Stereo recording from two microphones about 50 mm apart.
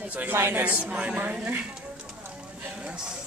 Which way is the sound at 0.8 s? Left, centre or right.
Right.